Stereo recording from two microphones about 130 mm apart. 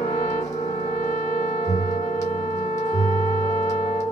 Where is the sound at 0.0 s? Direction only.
55° left (ahead or behind).